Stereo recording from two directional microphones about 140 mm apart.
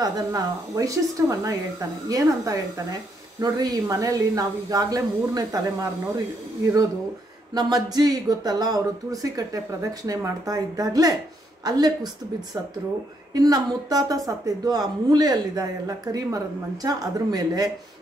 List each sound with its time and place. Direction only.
0.0 s speech: 25° right (ahead or behind)
2.0 s speech: 25° right (ahead or behind)
7.5 s speech: 30° right (ahead or behind)
13.3 s speech: 30° right (ahead or behind)